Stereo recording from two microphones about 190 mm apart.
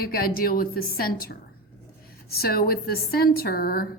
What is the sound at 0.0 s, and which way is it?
A woman's voice, 55° left (ahead or behind).